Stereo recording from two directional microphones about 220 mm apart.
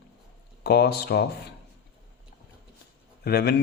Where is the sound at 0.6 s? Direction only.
45° left (ahead or behind).